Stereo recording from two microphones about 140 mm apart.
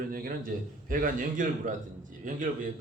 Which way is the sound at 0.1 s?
90° right.